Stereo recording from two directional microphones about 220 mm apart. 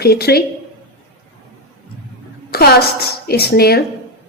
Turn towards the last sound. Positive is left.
turn(degrees=45)  # may be behind; listen again after turning